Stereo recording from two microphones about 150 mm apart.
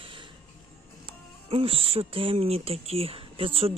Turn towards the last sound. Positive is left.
turn(degrees=-40)  # may be behind; listen again after turning